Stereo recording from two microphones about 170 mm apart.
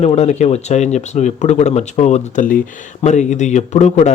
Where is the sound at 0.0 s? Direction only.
40° left (ahead or behind).